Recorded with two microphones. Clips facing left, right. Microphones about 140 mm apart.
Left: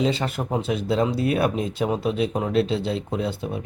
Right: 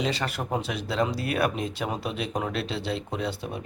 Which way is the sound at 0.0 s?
20° left (ahead or behind).